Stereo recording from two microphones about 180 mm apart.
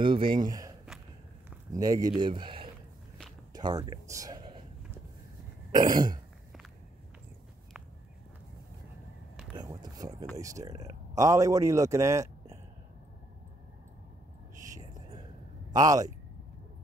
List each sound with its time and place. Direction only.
0.0 s speech: 25° right (ahead or behind)
5.7 s speech: 25° right (ahead or behind)
9.6 s a sound: 20° right (ahead or behind)
10.3 s a man's voice: 20° right (ahead or behind)
15.7 s speech: 20° right (ahead or behind)